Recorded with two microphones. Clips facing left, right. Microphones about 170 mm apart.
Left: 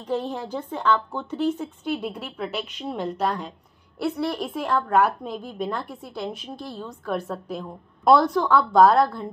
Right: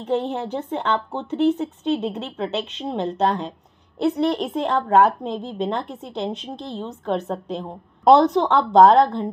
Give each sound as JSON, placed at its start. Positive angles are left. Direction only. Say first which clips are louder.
{"t": 0.0, "sound": "a woman's voice", "louder": "right 4 dB", "side_deg": -25}